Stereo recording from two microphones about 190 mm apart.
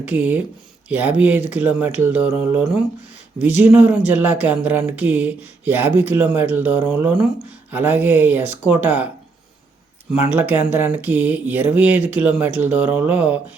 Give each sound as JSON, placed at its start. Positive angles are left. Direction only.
{"t": 0.0, "sound": "speech", "side_deg": -10}
{"t": 10.3, "sound": "speech", "side_deg": -10}